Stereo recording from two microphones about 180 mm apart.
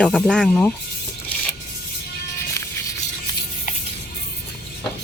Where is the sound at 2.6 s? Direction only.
15° left (ahead or behind).